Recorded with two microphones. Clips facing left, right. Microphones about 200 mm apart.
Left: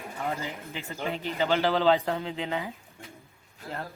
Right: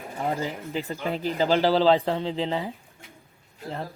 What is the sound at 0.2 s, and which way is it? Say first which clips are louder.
Speech: right 5 dB; 35° right (ahead or behind).